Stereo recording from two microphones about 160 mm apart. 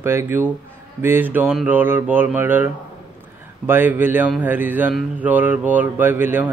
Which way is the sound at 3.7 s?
10° right (ahead or behind).